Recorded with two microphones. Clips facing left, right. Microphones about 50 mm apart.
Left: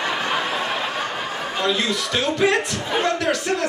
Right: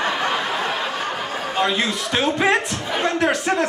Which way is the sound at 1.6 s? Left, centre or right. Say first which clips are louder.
Right 1 dB; right.